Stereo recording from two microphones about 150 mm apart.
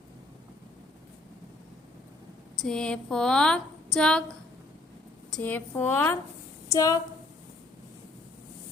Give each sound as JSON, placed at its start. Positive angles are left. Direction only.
{"t": 2.6, "sound": "speech", "side_deg": 5}
{"t": 5.4, "sound": "a woman's voice", "side_deg": 10}